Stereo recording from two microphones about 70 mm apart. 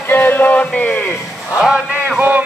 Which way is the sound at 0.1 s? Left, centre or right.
Left.